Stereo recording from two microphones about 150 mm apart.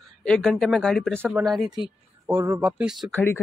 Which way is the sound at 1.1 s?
15° right (ahead or behind).